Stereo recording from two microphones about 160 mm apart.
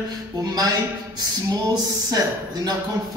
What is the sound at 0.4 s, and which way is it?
Speech, 25° right (ahead or behind).